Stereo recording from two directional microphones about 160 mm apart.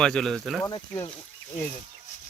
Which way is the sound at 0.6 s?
25° left (ahead or behind).